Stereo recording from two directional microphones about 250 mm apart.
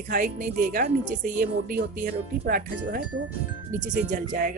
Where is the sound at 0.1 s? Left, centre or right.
Right.